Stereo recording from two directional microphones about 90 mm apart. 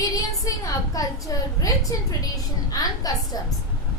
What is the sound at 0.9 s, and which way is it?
A woman's voice, 40° left (ahead or behind).